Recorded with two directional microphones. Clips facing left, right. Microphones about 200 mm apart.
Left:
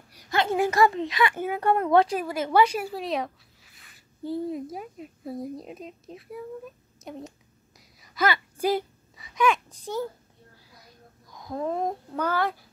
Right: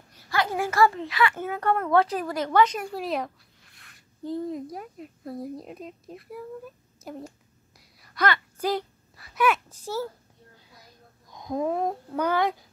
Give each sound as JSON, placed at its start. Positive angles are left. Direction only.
{"t": 0.1, "sound": "speech", "side_deg": 20}
{"t": 9.1, "sound": "a sound", "side_deg": -5}
{"t": 11.3, "sound": "babbling", "side_deg": -20}
{"t": 11.7, "sound": "child singing", "side_deg": -5}
{"t": 12.2, "sound": "speech", "side_deg": -15}